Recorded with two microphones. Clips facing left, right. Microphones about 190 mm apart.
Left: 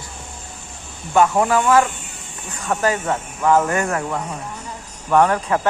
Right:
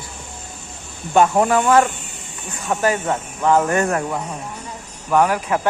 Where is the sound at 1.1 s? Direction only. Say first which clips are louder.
Right 1 dB; 25° right (ahead or behind).